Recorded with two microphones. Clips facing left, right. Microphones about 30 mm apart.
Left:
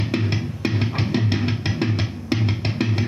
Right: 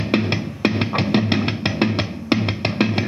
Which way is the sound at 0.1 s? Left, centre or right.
Right.